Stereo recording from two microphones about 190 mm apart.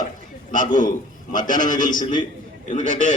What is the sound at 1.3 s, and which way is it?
Speech, 40° left (ahead or behind).